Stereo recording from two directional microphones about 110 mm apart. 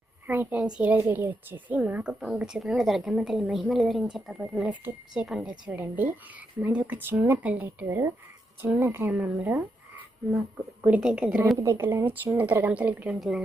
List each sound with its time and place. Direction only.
0.8 s a woman's voice: 15° right (ahead or behind)
10.8 s a woman's voice: 10° right (ahead or behind)
11.5 s a woman's voice: 30° right (ahead or behind); by 13.1 s 15° right (ahead or behind)
13.1 s a woman's voice: centre (ahead or behind)